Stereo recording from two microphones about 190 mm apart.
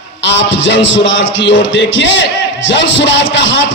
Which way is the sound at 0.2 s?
75° left (ahead or behind).